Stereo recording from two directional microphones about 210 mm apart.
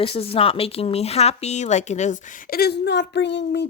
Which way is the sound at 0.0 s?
25° left (ahead or behind).